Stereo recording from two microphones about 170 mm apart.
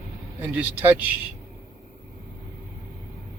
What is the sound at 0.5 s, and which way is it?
Speech, 10° right (ahead or behind).